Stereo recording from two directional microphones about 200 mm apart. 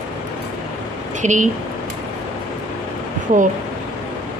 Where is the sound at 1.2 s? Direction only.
35° right (ahead or behind).